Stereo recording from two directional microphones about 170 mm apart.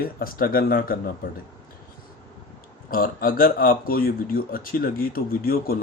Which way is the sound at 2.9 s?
55° left (ahead or behind).